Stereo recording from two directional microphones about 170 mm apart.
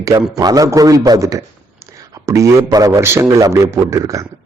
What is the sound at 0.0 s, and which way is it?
A man's voice, 20° right (ahead or behind).